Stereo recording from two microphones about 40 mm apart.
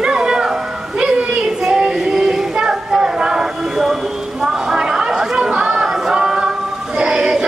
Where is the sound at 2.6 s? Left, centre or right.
Centre.